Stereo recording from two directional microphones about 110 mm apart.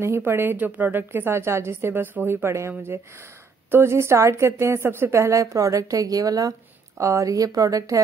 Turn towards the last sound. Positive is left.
turn(degrees=-30)  # may be behind; listen again after turning